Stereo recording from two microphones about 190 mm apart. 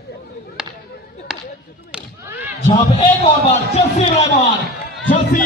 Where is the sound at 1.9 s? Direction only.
5° right (ahead or behind).